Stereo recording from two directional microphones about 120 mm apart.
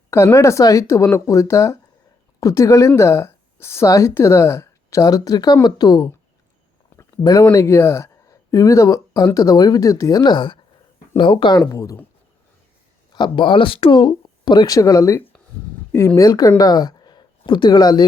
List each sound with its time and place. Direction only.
0.1 s speech: 25° left (ahead or behind)
6.9 s a sound: 30° left (ahead or behind)
7.5 s speech: 25° left (ahead or behind); by 11.5 s 45° left (ahead or behind)
11.7 s speech: 30° left (ahead or behind)
13.1 s speech: 40° left (ahead or behind)